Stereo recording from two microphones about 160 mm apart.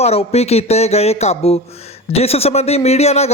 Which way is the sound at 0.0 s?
40° left (ahead or behind).